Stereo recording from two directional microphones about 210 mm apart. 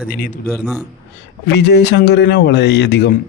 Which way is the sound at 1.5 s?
55° left (ahead or behind).